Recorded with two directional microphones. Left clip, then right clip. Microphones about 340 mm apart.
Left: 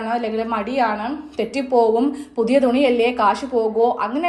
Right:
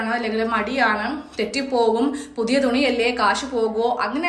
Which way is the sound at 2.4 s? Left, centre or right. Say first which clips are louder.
Left 3 dB; centre.